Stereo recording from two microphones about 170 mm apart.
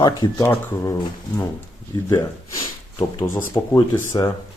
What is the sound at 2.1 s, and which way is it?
Speech, 20° left (ahead or behind).